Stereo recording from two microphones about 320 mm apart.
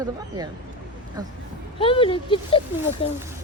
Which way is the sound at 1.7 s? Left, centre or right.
Centre.